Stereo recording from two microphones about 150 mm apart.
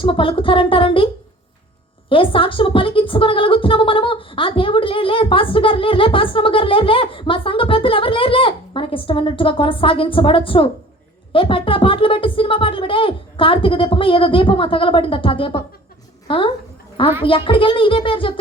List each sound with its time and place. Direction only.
0.0 s speech: 35° left (ahead or behind)
2.0 s a woman's voice: 35° left (ahead or behind)